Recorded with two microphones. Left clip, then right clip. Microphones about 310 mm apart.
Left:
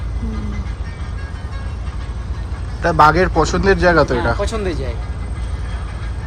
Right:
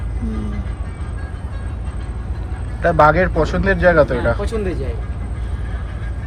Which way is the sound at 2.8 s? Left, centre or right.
Centre.